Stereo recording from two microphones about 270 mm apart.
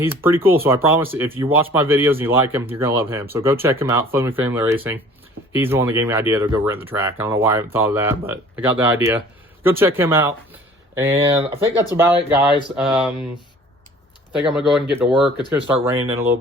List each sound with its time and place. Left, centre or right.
0.0 s speech: centre
14.3 s speech: centre